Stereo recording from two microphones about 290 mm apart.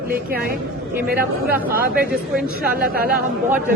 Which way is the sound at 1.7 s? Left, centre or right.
Right.